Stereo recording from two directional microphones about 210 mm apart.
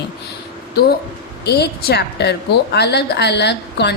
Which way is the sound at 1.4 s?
50° left (ahead or behind).